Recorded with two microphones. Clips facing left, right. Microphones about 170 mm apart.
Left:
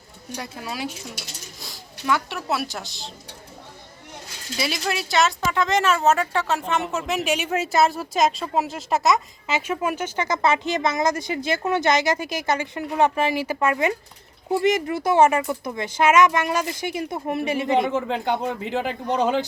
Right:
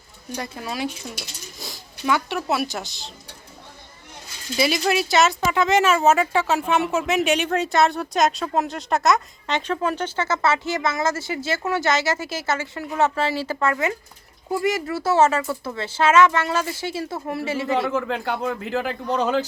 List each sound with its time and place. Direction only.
0.3 s speech: 5° left (ahead or behind)
4.5 s speech: centre (ahead or behind); by 19.5 s 15° left (ahead or behind)